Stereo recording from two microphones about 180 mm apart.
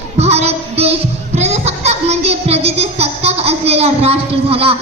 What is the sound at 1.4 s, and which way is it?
Child singing, 35° right (ahead or behind).